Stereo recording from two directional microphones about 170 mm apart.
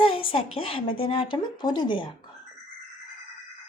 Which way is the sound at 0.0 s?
30° left (ahead or behind).